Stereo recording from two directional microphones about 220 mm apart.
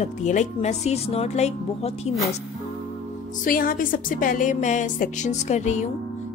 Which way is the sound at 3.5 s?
40° left (ahead or behind).